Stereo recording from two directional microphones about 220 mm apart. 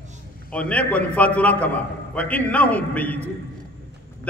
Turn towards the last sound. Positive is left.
turn(degrees=5)  # may be behind; listen again after turning